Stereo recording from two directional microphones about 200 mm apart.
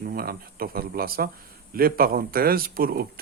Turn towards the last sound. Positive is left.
turn(degrees=-45)  # may be behind; listen again after turning